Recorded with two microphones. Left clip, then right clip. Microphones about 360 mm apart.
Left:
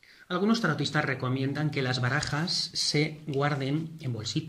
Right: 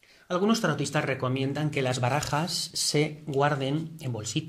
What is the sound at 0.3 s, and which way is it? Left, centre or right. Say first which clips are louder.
Speech: right 2 dB; centre.